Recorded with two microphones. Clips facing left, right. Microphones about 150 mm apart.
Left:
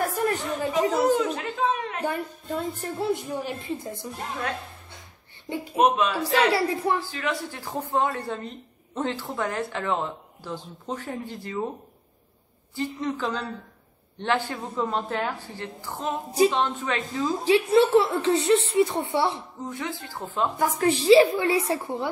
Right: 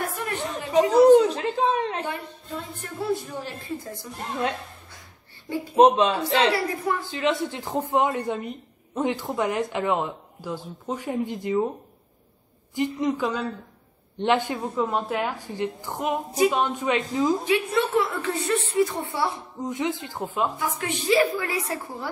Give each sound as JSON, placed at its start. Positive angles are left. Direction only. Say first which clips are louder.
{"t": 0.0, "sound": "chatter", "louder": "left 4 dB", "side_deg": 40}
{"t": 0.7, "sound": "a sound", "louder": "right 8 dB", "side_deg": -35}
{"t": 2.8, "sound": "a woman's voice", "louder": "left 1 dB", "side_deg": 25}
{"t": 5.8, "sound": "a man's voice", "louder": "right 4 dB", "side_deg": -30}
{"t": 6.5, "sound": "a woman's voice", "louder": "left 2 dB", "side_deg": 30}
{"t": 7.0, "sound": "speech", "louder": "right 5 dB", "side_deg": -20}
{"t": 12.7, "sound": "speech", "louder": "right 4 dB", "side_deg": -15}
{"t": 14.7, "sound": "speech", "louder": "right 1 dB", "side_deg": 0}
{"t": 17.5, "sound": "a woman's voice", "louder": "left 5 dB", "side_deg": 30}
{"t": 19.6, "sound": "speech", "louder": "right 6 dB", "side_deg": -20}
{"t": 20.5, "sound": "a woman's voice", "louder": "left 6 dB", "side_deg": 40}